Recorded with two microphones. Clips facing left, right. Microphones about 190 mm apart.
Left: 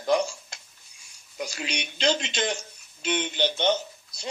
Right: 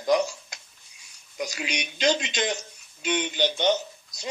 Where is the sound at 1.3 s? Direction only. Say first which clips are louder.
Right 1 dB; 20° right (ahead or behind).